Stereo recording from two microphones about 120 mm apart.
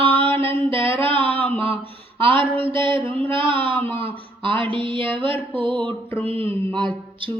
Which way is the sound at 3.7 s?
15° left (ahead or behind).